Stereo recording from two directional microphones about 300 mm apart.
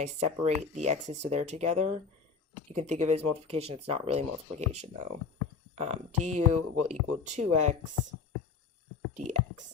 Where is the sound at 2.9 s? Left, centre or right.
Right.